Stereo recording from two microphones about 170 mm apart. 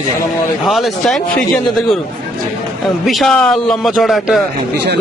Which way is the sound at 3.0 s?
Centre (ahead or behind).